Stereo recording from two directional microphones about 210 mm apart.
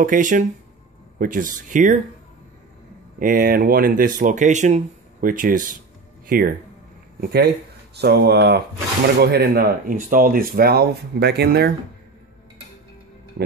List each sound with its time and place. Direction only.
0.0 s speech: 40° right (ahead or behind)
3.2 s speech: 45° right (ahead or behind)